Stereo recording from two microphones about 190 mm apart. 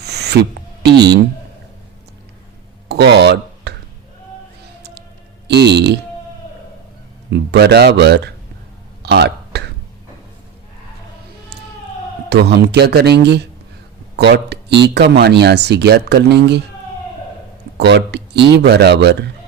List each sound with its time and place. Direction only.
0.0 s a sound: 60° right (ahead or behind)
0.8 s speech: 60° right (ahead or behind)
2.9 s a sound: 65° right (ahead or behind)
5.5 s speech: 65° right (ahead or behind)
7.3 s speech: 60° right (ahead or behind)
9.0 s throat clearing: 60° right (ahead or behind)
12.3 s speech: 60° right (ahead or behind)
17.7 s speech: 60° right (ahead or behind)